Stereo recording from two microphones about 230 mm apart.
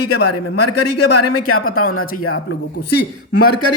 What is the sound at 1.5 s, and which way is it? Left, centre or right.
Speech, left.